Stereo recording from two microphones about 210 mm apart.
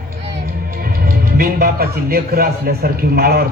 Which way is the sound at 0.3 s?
45° right (ahead or behind).